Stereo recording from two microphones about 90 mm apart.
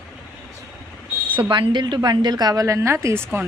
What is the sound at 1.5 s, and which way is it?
A woman's voice, 60° right (ahead or behind).